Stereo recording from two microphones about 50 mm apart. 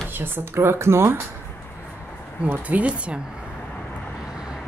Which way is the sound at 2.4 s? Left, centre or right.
Right.